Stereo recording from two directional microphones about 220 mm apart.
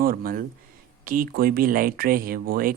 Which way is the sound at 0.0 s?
40° right (ahead or behind).